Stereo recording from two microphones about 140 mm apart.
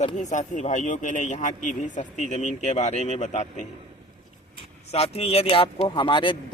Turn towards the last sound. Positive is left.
turn(degrees=35)  # may be behind; listen again after turning